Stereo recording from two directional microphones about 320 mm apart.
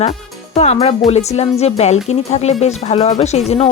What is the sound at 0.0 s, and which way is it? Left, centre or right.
Speech, centre.